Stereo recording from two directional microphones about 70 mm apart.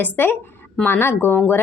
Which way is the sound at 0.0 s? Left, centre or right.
Left.